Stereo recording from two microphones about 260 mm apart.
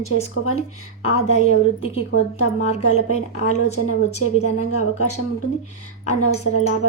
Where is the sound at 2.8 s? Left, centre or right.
Left.